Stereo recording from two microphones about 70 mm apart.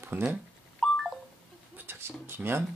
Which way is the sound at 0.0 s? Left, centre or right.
Right.